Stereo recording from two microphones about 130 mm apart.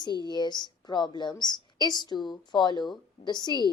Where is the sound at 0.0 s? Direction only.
35° left (ahead or behind).